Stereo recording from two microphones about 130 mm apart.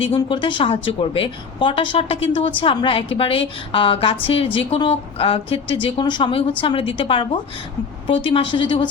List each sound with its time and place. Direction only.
0.0 s a woman's voice: 40° left (ahead or behind)